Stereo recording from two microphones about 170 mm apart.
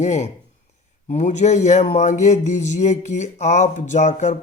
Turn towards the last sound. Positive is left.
turn(degrees=45)  # may be behind; listen again after turning